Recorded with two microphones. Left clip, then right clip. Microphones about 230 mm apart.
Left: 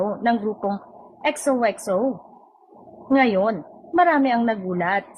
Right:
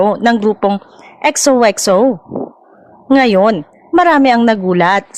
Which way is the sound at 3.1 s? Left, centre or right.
Right.